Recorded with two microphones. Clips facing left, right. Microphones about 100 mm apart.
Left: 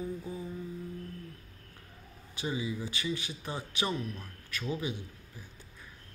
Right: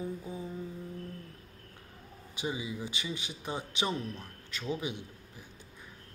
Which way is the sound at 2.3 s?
15° right (ahead or behind).